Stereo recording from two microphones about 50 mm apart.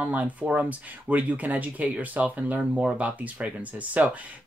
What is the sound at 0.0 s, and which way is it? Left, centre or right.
Speech, right.